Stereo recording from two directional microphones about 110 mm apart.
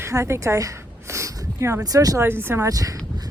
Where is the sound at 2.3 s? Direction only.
20° right (ahead or behind).